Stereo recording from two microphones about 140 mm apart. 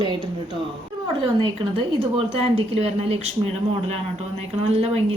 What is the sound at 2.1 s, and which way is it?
Speech, 45° right (ahead or behind).